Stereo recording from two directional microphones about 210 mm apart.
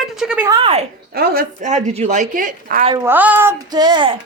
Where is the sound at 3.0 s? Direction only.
10° right (ahead or behind).